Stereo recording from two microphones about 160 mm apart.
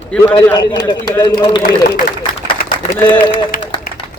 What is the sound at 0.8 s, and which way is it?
Speech, 25° left (ahead or behind).